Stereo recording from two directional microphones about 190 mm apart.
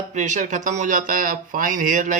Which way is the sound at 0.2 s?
40° right (ahead or behind).